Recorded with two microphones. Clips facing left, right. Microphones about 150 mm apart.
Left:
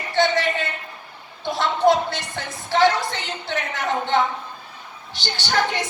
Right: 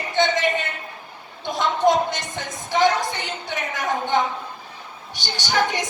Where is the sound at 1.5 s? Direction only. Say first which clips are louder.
Even; 15° right (ahead or behind).